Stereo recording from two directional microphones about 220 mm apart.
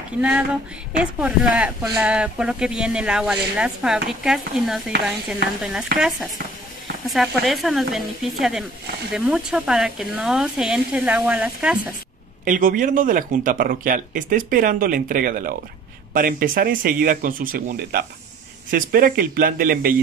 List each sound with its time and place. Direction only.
0.9 s speech: 5° right (ahead or behind)
7.1 s speech: centre (ahead or behind)
12.4 s speech: 40° right (ahead or behind)